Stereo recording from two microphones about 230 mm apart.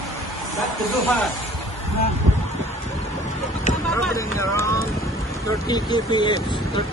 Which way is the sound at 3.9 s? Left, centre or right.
Centre.